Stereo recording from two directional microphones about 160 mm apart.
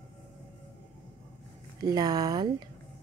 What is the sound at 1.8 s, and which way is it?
Speech, 25° right (ahead or behind).